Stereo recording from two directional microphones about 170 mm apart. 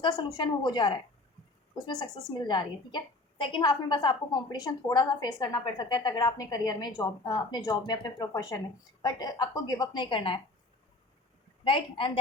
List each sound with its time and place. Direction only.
0.0 s a woman's voice: 25° left (ahead or behind)
11.6 s a woman's voice: 30° left (ahead or behind)